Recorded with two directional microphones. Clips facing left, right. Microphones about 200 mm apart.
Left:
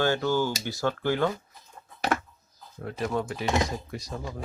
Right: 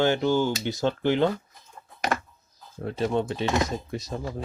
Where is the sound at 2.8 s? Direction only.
25° right (ahead or behind).